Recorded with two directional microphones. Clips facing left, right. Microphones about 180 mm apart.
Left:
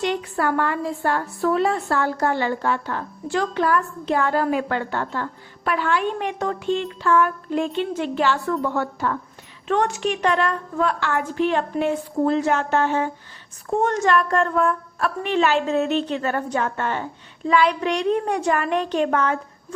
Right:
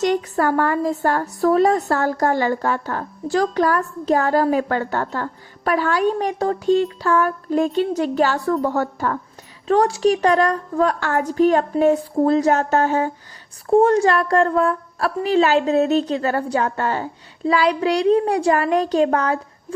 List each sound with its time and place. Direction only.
0.0 s a woman's voice: 45° right (ahead or behind)